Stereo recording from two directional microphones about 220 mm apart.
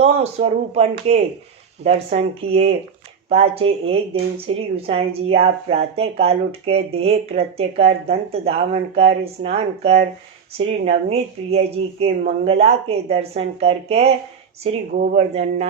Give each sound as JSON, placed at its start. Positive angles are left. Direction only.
{"t": 0.0, "sound": "speech", "side_deg": -30}